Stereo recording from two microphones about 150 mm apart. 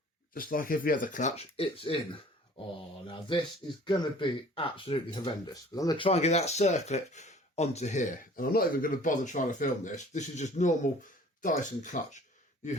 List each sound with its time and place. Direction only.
0.3 s speech: 70° left (ahead or behind)
1.5 s speech: 40° left (ahead or behind)
3.1 s speech: 35° left (ahead or behind)
5.7 s speech: 25° left (ahead or behind)
6.1 s speech: 45° left (ahead or behind)